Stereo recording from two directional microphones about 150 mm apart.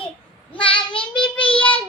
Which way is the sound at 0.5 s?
35° left (ahead or behind).